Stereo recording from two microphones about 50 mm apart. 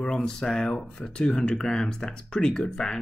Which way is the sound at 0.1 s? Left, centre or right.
Centre.